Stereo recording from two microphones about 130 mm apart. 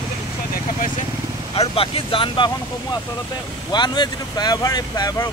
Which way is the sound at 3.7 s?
35° left (ahead or behind).